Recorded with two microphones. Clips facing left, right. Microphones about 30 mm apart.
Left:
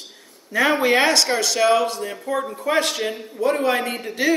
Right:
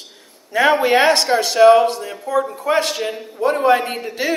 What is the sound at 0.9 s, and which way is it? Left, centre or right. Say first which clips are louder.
Speech: right 3 dB; right.